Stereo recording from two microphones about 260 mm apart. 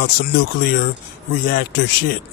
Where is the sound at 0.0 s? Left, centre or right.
Left.